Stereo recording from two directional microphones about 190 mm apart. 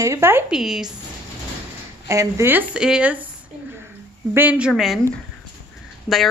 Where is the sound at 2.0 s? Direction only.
15° right (ahead or behind).